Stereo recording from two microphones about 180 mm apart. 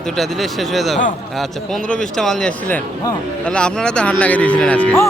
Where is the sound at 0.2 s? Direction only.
Centre (ahead or behind).